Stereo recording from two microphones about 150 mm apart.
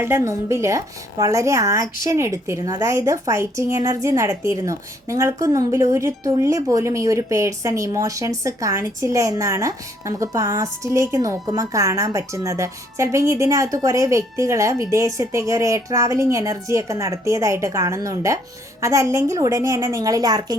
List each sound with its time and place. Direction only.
0.0 s a woman's voice: 20° right (ahead or behind)